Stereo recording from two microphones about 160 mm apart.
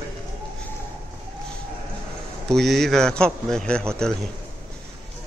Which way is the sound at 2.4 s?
Centre (ahead or behind).